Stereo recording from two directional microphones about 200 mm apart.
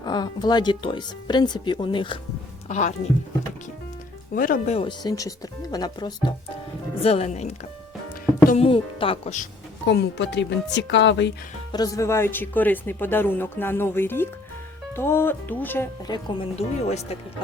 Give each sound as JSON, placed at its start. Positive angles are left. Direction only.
{"t": 0.0, "sound": "speech", "side_deg": 20}
{"t": 2.6, "sound": "speech", "side_deg": 35}
{"t": 4.4, "sound": "speech", "side_deg": 45}
{"t": 9.8, "sound": "speech", "side_deg": 60}
{"t": 11.7, "sound": "speech", "side_deg": 15}
{"t": 16.0, "sound": "speech", "side_deg": 20}